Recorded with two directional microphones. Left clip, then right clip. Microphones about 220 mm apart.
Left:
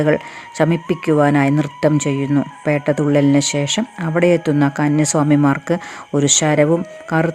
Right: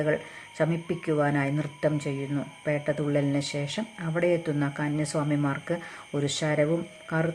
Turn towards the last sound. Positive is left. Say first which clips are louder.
# left 11 dB
turn(degrees=35)  # may be behind; listen again after turning